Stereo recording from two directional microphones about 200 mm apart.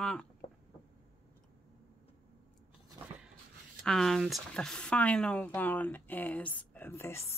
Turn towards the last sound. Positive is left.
turn(degrees=10)  # may be behind; listen again after turning